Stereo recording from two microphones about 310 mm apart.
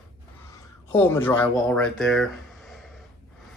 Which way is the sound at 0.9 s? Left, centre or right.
Centre.